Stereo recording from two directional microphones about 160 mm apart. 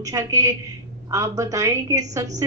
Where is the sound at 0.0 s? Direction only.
20° right (ahead or behind).